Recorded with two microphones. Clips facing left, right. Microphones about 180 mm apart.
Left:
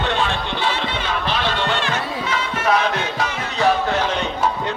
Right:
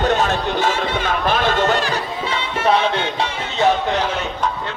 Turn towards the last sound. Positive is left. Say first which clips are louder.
# right 1 dB
turn(degrees=-30)  # may be behind; listen again after turning